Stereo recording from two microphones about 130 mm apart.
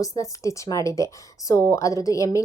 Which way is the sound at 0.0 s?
25° left (ahead or behind).